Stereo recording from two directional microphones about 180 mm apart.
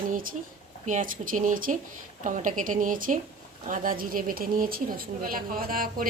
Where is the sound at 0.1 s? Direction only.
50° right (ahead or behind).